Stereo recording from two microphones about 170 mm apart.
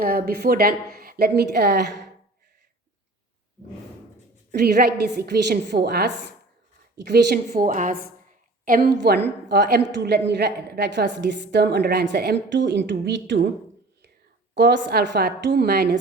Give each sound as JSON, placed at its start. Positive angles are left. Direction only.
{"t": 0.0, "sound": "a woman's voice", "side_deg": -65}
{"t": 4.5, "sound": "a woman's voice", "side_deg": -70}
{"t": 7.5, "sound": "a woman's voice", "side_deg": -50}
{"t": 9.0, "sound": "a woman's voice", "side_deg": -80}
{"t": 14.5, "sound": "a woman's voice", "side_deg": -90}